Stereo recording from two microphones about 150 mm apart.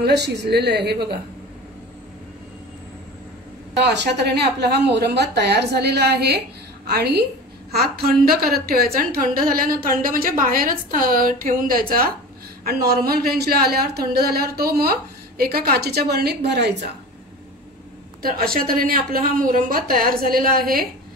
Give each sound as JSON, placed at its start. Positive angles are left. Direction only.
{"t": 0.0, "sound": "a woman's voice", "side_deg": -90}
{"t": 3.7, "sound": "a woman's voice", "side_deg": -90}
{"t": 12.6, "sound": "a woman's voice", "side_deg": -90}
{"t": 18.2, "sound": "a woman's voice", "side_deg": -80}